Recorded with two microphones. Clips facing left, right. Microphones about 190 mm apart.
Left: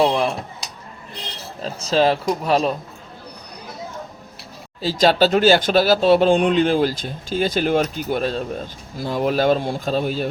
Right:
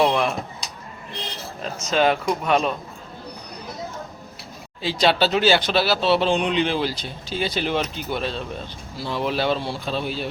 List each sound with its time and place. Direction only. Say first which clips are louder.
0.0 s a sound: left 2 dB; 30° left (ahead or behind)
1.6 s speech: left 2 dB; 30° left (ahead or behind)
4.8 s speech: left 4 dB; 40° left (ahead or behind)